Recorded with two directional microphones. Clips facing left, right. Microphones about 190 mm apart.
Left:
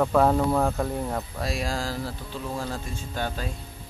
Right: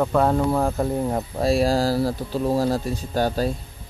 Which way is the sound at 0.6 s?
15° right (ahead or behind).